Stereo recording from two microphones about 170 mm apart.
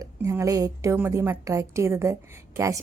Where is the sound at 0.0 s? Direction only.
20° right (ahead or behind).